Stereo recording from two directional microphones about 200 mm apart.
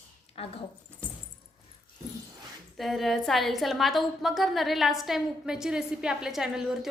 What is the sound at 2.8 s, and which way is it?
A woman's voice, centre (ahead or behind).